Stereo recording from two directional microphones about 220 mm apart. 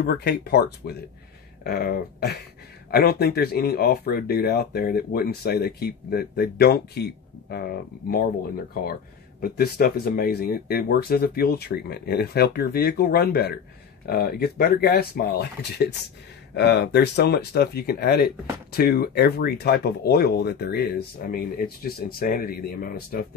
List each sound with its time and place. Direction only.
0.0 s speech: 45° left (ahead or behind)
9.4 s speech: 45° left (ahead or behind)